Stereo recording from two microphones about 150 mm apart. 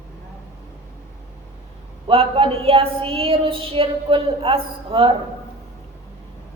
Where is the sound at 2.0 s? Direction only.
35° right (ahead or behind).